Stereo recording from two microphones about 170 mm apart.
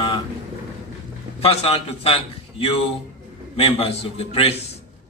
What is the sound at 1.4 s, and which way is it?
A man's voice, 35° left (ahead or behind).